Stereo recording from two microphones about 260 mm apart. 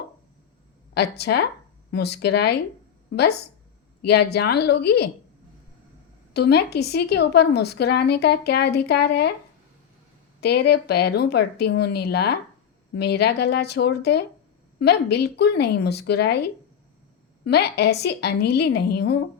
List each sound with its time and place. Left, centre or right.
0.9 s a woman's voice: left
4.0 s a woman's voice: left
6.3 s a woman's voice: left
10.4 s a woman's voice: left
17.4 s a woman's voice: left